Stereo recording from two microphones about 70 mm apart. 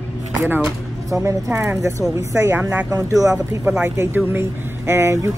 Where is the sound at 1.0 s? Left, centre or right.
Right.